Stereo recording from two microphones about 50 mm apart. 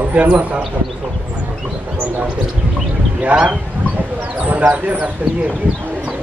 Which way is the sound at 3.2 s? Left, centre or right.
Right.